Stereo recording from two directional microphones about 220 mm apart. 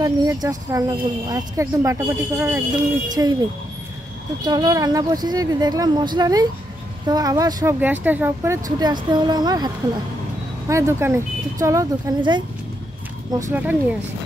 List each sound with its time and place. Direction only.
0.0 s speech: 15° right (ahead or behind)
4.5 s speech: 20° right (ahead or behind)
10.7 s speech: 10° right (ahead or behind)